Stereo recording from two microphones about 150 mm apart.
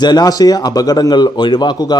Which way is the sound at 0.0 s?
30° left (ahead or behind).